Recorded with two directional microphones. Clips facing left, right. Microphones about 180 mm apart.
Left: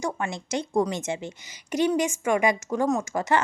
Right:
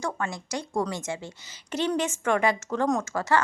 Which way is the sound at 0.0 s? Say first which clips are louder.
Left 2 dB; 20° left (ahead or behind).